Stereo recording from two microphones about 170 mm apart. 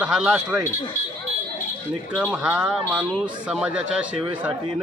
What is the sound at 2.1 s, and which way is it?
Speech, 5° right (ahead or behind).